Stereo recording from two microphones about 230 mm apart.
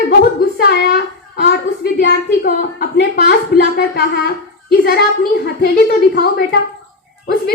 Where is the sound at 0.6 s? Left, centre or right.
Left.